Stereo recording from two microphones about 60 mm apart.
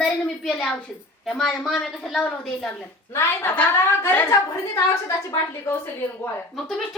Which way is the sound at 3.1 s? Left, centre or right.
Left.